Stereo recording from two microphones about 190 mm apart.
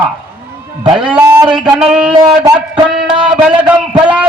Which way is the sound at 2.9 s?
5° right (ahead or behind).